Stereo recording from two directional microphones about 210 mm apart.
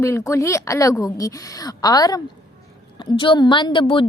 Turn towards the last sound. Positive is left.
turn(degrees=25)  # may be behind; listen again after turning